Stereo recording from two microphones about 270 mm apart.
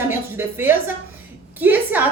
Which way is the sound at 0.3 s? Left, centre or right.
Centre.